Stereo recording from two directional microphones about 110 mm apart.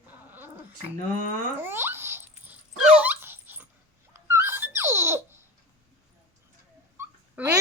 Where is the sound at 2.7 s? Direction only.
5° right (ahead or behind).